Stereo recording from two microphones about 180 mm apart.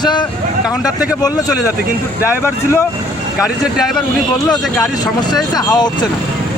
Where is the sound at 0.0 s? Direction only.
25° left (ahead or behind).